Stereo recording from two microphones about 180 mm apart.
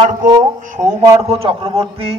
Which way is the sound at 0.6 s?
45° right (ahead or behind).